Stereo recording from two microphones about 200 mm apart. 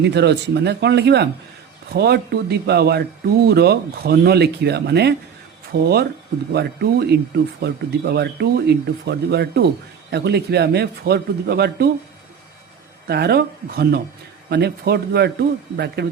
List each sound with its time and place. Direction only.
0.0 s speech: 60° right (ahead or behind)
13.1 s speech: 55° right (ahead or behind)